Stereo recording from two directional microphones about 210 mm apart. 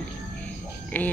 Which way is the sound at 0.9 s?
10° left (ahead or behind).